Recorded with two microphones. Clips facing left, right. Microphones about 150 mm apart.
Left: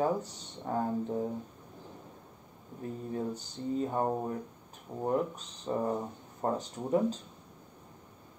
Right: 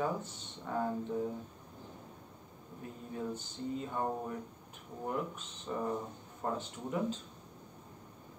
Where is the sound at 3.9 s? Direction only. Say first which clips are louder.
Left 5 dB; 35° left (ahead or behind).